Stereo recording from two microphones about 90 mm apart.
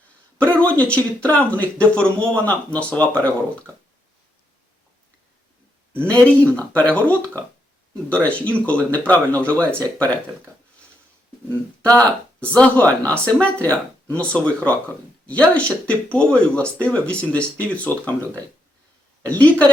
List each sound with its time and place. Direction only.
0.3 s speech: 15° left (ahead or behind)
5.9 s speech: 25° right (ahead or behind)
6.6 s speech: 15° left (ahead or behind)
11.8 s speech: 15° left (ahead or behind)